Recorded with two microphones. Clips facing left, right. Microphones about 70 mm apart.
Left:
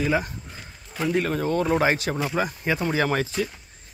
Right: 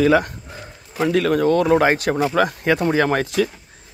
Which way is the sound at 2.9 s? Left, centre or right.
Right.